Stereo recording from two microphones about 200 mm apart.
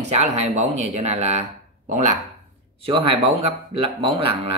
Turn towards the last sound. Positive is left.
turn(degrees=-25)  # may be behind; listen again after turning